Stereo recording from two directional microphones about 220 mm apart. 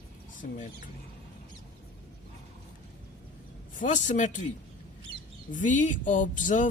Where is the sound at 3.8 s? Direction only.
35° left (ahead or behind).